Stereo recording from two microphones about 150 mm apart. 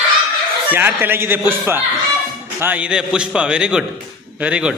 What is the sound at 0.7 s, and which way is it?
A man's voice, 15° right (ahead or behind).